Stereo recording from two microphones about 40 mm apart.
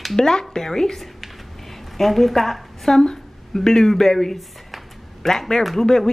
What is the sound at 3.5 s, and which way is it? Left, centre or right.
Speech, centre.